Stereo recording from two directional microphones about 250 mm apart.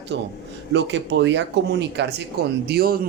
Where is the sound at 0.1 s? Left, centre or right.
Right.